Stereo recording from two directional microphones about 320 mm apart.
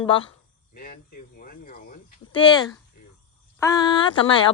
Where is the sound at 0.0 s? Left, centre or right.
Centre.